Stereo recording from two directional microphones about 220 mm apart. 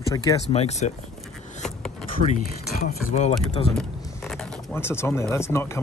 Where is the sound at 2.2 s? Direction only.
40° left (ahead or behind).